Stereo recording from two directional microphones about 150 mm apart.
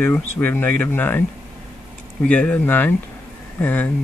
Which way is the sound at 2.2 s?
10° left (ahead or behind).